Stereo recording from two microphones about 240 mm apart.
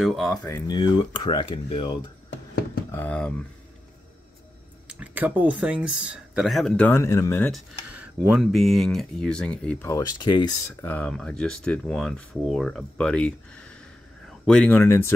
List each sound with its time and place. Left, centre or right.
0.0 s speech: centre
0.4 s speech: centre
2.9 s speech: centre
4.8 s speech: centre
7.9 s speech: centre